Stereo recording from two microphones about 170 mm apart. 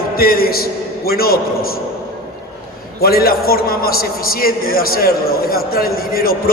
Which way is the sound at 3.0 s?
60° left (ahead or behind).